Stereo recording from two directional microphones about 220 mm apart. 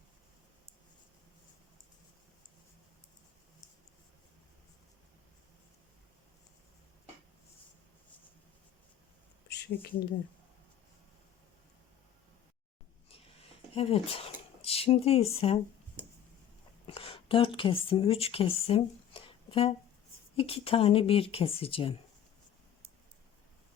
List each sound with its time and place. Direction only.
9.5 s speech: 45° left (ahead or behind)
13.7 s speech: 25° left (ahead or behind)
16.8 s speech: 25° left (ahead or behind)